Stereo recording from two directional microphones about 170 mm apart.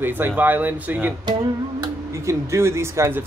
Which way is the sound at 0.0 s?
10° right (ahead or behind).